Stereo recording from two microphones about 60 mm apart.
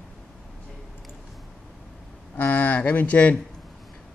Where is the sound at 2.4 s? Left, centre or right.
Left.